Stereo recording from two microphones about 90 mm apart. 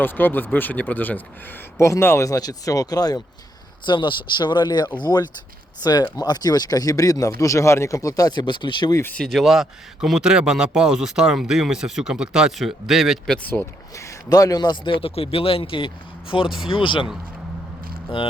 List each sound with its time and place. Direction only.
0.0 s speech: 20° left (ahead or behind)
1.8 s speech: 30° left (ahead or behind); by 3.2 s 45° left (ahead or behind)
3.8 s speech: 60° left (ahead or behind)
9.1 s a man's voice: 5° left (ahead or behind)
13.5 s speech: 10° left (ahead or behind)
13.9 s speech: 35° left (ahead or behind); by 14.9 s 55° left (ahead or behind)
15.0 s speech: 90° left
16.5 s speech: 5° right (ahead or behind)
16.7 s speech: 70° left (ahead or behind)